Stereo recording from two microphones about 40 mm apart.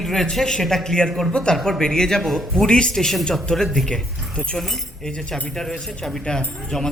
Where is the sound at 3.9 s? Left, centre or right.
Centre.